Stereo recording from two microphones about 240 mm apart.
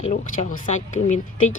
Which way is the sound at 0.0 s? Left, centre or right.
Left.